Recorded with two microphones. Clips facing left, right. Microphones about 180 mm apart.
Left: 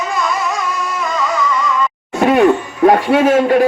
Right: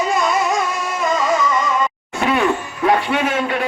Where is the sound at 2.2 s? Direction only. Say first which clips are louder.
Left 7 dB; 45° left (ahead or behind).